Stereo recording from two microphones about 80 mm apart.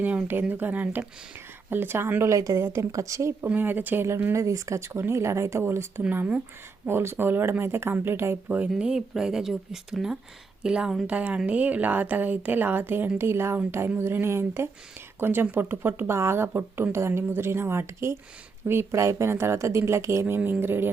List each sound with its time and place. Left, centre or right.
0.0 s a woman's voice: centre; by 3.5 s right
3.5 s a woman's voice: right
4.4 s speech: right
6.0 s a woman's voice: centre
6.8 s a woman's voice: right
8.4 s a woman's voice: centre